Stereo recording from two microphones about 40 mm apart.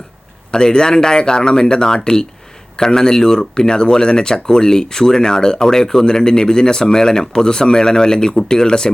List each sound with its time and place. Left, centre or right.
0.5 s speech: centre